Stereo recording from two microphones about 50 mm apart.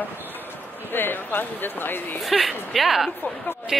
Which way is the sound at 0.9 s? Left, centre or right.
Left.